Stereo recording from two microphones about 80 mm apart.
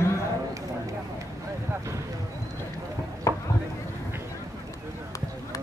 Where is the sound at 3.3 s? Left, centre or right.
Left.